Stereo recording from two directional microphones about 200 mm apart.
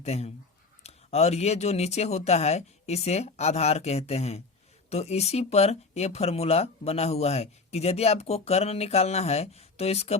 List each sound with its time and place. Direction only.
0.0 s speech: 30° left (ahead or behind)